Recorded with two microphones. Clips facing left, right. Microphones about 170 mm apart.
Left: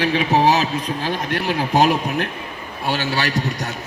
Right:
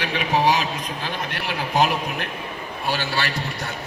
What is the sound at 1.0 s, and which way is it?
A man's voice, 45° left (ahead or behind).